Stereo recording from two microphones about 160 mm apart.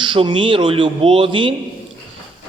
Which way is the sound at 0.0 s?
30° right (ahead or behind).